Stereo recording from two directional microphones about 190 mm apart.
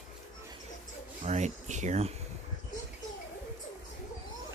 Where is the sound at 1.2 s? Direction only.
40° right (ahead or behind).